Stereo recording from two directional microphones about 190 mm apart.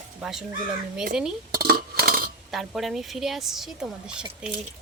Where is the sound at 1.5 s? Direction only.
50° right (ahead or behind).